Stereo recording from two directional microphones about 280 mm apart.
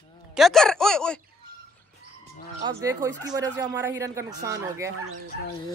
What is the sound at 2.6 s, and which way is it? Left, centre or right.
Speech, centre.